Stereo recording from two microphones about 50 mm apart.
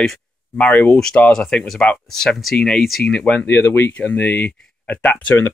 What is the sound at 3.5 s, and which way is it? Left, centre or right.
Speech, left.